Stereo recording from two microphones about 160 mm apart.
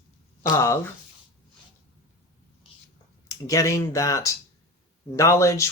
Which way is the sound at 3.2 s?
20° left (ahead or behind).